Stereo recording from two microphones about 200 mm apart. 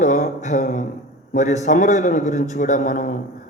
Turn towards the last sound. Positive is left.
turn(degrees=40)  # may be behind; listen again after turning